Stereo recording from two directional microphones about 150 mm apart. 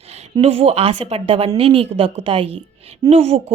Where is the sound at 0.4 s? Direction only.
40° right (ahead or behind).